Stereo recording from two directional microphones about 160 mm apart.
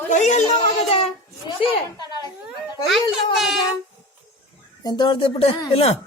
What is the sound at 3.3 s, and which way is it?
Speech, centre (ahead or behind).